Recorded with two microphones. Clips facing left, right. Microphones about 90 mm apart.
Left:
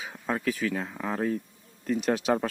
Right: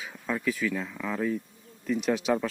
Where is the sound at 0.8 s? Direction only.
35° left (ahead or behind).